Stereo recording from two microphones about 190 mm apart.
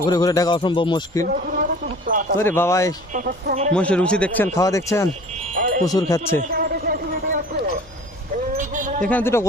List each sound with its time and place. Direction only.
0.0 s speech: 20° left (ahead or behind)
1.2 s a sound: 50° right (ahead or behind)
2.4 s speech: 10° left (ahead or behind)
3.1 s speech: 45° right (ahead or behind)
3.8 s speech: 5° left (ahead or behind)
4.5 s speech: 15° left (ahead or behind)
5.5 s music: 45° right (ahead or behind)
5.8 s speech: 20° left (ahead or behind)
6.5 s a sound: 50° right (ahead or behind)
9.0 s speech: 10° left (ahead or behind)